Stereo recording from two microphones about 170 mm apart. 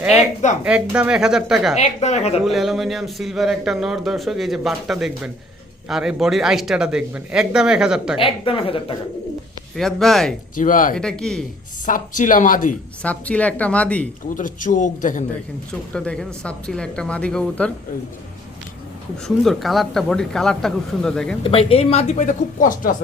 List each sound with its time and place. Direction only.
0.0 s a sound: 5° right (ahead or behind)
0.6 s a man's voice: 5° right (ahead or behind)
1.7 s speech: 40° left (ahead or behind)
2.4 s a man's voice: centre (ahead or behind)
8.2 s speech: 30° left (ahead or behind)
9.7 s a man's voice: centre (ahead or behind)
10.5 s speech: 50° left (ahead or behind)
10.9 s a man's voice: 5° left (ahead or behind)
11.9 s speech: 50° left (ahead or behind)
13.0 s speech: 5° left (ahead or behind)
14.3 s speech: 50° left (ahead or behind)
15.9 s a man's voice: 5° left (ahead or behind)
19.5 s a man's voice: centre (ahead or behind)
21.4 s speech: 35° left (ahead or behind); by 23.0 s 55° left (ahead or behind)